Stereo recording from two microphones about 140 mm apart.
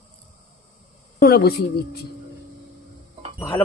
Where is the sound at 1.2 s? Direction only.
90° left.